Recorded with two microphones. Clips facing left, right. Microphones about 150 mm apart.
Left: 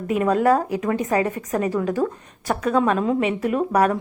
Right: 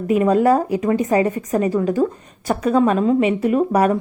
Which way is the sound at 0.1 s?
5° right (ahead or behind).